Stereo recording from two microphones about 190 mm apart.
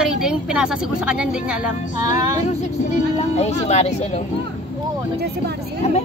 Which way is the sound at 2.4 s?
35° left (ahead or behind).